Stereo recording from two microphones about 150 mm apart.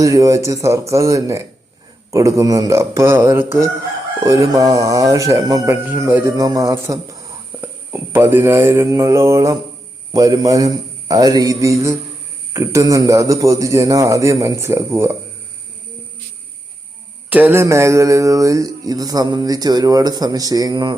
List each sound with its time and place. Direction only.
0.0 s speech: 20° right (ahead or behind)
17.2 s speech: 10° right (ahead or behind); by 20.9 s 25° right (ahead or behind)